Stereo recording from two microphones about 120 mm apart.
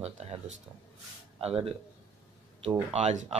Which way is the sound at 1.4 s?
55° right (ahead or behind).